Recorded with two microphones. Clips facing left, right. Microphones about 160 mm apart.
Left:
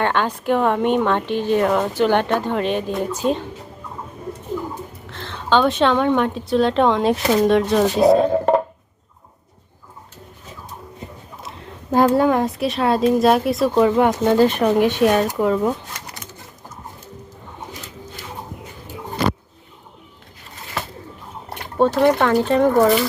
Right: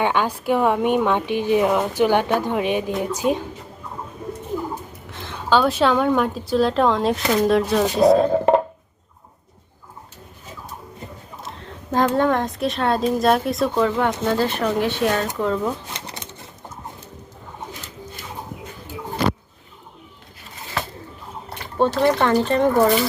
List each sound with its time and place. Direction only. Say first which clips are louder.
0.0 s speech: even; 10° right (ahead or behind)
5.1 s a woman's voice: left 1 dB; 15° right (ahead or behind)
11.9 s a woman's voice: left 3 dB; 10° left (ahead or behind)
13.7 s speech: left 7 dB; 15° left (ahead or behind)
15.9 s pigeon: right 2 dB; 25° right (ahead or behind)
21.8 s a woman's voice: left 2 dB; 5° left (ahead or behind)